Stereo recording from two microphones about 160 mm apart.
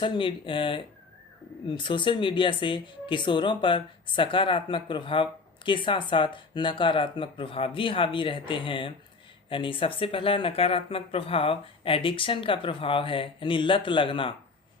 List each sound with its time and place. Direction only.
0.0 s speech: 30° left (ahead or behind)